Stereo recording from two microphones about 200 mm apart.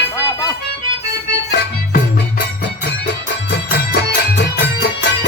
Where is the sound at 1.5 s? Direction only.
50° left (ahead or behind).